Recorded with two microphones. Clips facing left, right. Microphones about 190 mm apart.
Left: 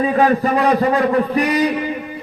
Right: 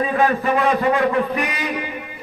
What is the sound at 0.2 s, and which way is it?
A man's voice, 35° left (ahead or behind).